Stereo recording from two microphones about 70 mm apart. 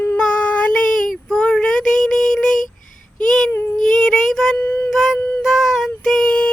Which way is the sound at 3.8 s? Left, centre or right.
Centre.